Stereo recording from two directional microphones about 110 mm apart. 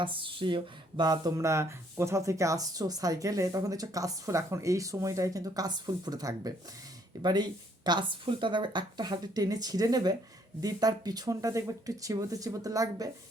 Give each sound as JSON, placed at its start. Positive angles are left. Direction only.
{"t": 0.0, "sound": "speech", "side_deg": -50}